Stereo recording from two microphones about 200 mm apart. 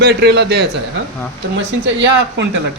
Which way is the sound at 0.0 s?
55° right (ahead or behind).